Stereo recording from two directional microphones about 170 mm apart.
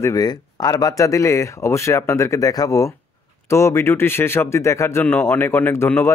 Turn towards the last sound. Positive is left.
turn(degrees=15)  # may be behind; listen again after turning